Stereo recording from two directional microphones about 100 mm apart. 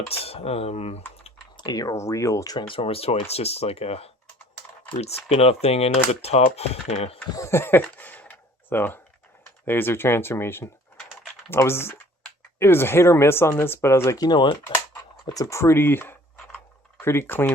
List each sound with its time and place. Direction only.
0.1 s speech: 80° left
1.5 s speech: 45° left (ahead or behind)
2.6 s speech: 65° left (ahead or behind); by 7.2 s 90° left
7.3 s a sound: 25° left (ahead or behind)
9.6 s speech: 20° left (ahead or behind)
14.3 s speech: 55° left (ahead or behind)
15.3 s speech: 35° left (ahead or behind)